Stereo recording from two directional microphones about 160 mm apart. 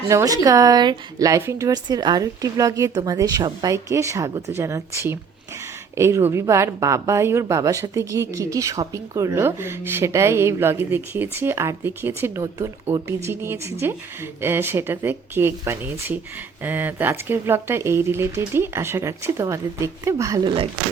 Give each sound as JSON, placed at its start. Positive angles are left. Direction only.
{"t": 0.1, "sound": "a woman's voice", "side_deg": -20}